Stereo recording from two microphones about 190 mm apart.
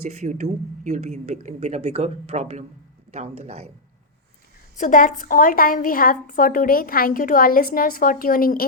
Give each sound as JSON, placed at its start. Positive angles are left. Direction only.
{"t": 0.2, "sound": "speech", "side_deg": -35}
{"t": 4.8, "sound": "a woman's voice", "side_deg": 45}